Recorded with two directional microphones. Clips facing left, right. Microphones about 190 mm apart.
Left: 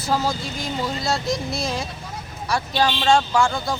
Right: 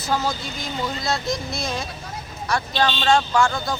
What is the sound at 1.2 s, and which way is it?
Speech, 35° left (ahead or behind).